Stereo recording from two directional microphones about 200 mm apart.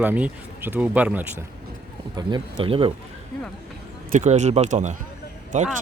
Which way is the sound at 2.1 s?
25° right (ahead or behind).